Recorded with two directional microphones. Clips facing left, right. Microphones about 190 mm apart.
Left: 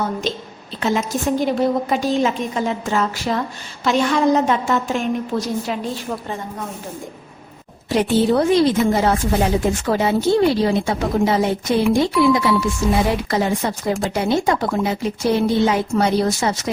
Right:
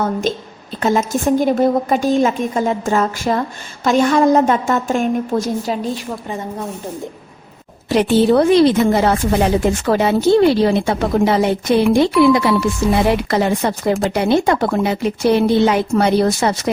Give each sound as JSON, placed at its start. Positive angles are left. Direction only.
{"t": 0.0, "sound": "a woman's voice", "side_deg": -50}
{"t": 7.9, "sound": "a woman's voice", "side_deg": -70}